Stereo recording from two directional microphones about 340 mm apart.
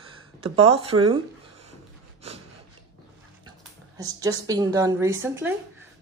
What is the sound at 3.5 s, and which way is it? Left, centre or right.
A woman's voice, centre.